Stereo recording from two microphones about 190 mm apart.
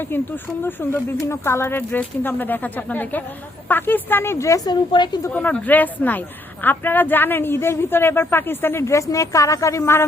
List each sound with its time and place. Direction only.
0.0 s speech: 10° left (ahead or behind)
5.3 s speech: 10° left (ahead or behind)